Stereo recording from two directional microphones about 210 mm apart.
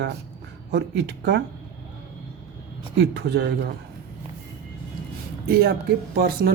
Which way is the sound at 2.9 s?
55° right (ahead or behind).